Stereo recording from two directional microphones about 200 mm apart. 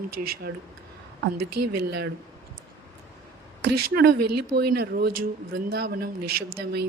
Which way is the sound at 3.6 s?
55° right (ahead or behind).